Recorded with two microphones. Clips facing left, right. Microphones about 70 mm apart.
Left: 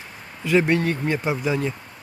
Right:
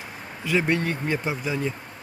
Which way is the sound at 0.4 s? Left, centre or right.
Centre.